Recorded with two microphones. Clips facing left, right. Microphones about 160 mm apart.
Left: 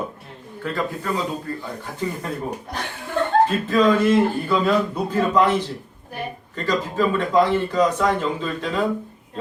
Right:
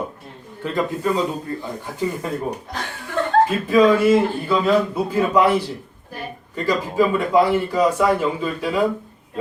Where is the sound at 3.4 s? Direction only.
10° right (ahead or behind).